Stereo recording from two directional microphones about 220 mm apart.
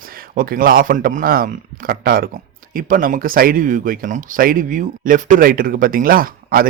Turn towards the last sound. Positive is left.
turn(degrees=-40)  # may be behind; listen again after turning